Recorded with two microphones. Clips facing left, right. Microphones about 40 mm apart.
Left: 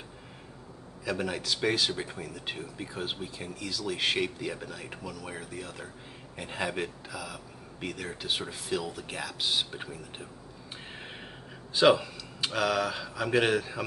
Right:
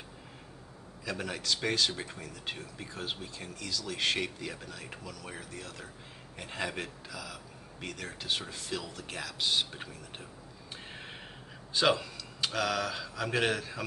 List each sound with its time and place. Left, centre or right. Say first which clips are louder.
1.0 s speech: left 4 dB; centre
11.7 s speech: left 5 dB; centre